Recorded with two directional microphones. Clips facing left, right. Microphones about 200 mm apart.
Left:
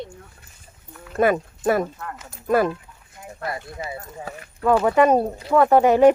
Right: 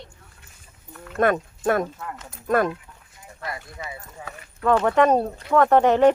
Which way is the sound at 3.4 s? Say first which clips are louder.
Left 4 dB; 30° left (ahead or behind).